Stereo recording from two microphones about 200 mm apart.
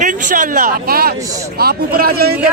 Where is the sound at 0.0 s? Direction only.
40° right (ahead or behind).